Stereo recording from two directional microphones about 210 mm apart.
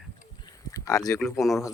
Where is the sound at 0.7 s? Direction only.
15° left (ahead or behind).